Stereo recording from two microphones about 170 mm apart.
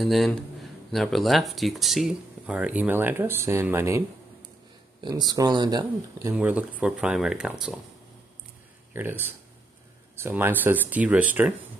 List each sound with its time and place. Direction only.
0.0 s speech: centre (ahead or behind)
5.0 s speech: 25° right (ahead or behind)
6.3 s speech: 10° right (ahead or behind)
8.9 s speech: 10° right (ahead or behind)